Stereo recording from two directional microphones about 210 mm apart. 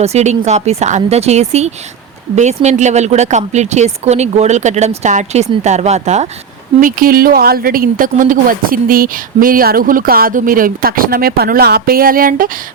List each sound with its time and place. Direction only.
0.0 s speech: 30° right (ahead or behind)